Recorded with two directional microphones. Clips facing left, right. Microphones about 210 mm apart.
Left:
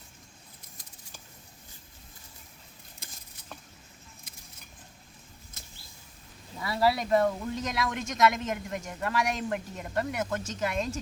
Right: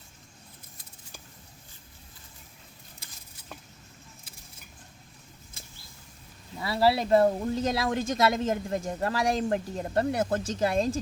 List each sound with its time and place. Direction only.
6.6 s speech: 30° right (ahead or behind)